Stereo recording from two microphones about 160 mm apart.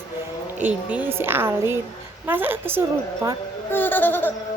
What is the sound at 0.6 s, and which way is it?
A woman's voice, 10° right (ahead or behind).